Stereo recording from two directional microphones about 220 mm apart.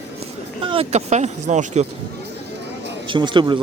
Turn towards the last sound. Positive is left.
turn(degrees=-20)  # may be behind; listen again after turning